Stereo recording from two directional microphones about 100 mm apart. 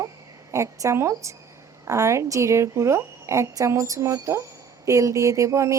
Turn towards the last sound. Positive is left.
turn(degrees=-30)  # may be behind; listen again after turning